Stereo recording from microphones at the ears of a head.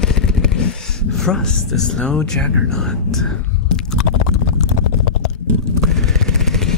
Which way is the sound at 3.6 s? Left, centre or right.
Left.